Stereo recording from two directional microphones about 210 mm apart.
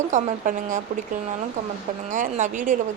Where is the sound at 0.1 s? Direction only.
35° right (ahead or behind).